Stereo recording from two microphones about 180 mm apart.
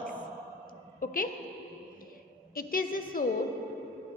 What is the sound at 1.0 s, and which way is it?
Speech, 50° left (ahead or behind).